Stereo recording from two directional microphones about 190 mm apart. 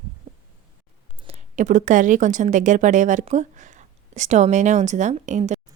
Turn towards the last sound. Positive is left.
turn(degrees=-40)  # may be behind; listen again after turning